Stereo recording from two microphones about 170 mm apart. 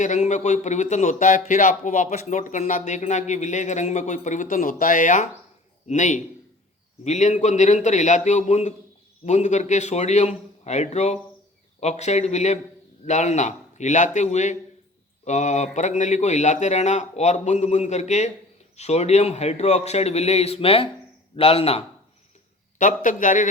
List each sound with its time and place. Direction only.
0.0 s a man's voice: 45° left (ahead or behind)
22.8 s a man's voice: 50° left (ahead or behind)